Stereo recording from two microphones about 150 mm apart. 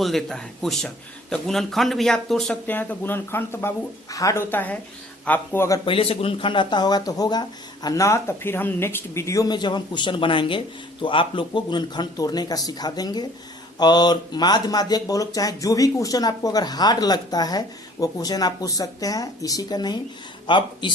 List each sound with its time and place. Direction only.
0.0 s a woman's voice: centre (ahead or behind); by 5.8 s 20° left (ahead or behind)
5.8 s speech: 35° left (ahead or behind)